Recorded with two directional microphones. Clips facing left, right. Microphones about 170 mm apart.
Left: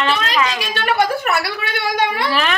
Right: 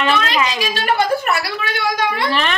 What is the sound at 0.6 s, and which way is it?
Speech, 60° left (ahead or behind).